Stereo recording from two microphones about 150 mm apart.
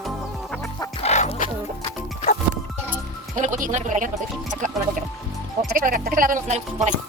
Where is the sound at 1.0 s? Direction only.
50° left (ahead or behind).